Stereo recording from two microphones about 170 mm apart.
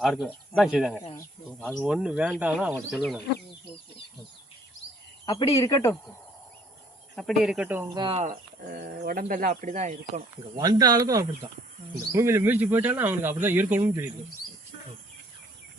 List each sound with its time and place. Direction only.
0.0 s speech: 5° right (ahead or behind)
5.2 s speech: 20° left (ahead or behind)
7.2 s speech: centre (ahead or behind)
7.9 s speech: 30° right (ahead or behind)
8.2 s speech: 60° right (ahead or behind); by 10.2 s 45° right (ahead or behind)
10.5 s speech: 20° right (ahead or behind)